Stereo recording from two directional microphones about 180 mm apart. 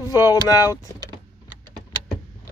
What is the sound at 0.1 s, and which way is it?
Speech, 20° left (ahead or behind).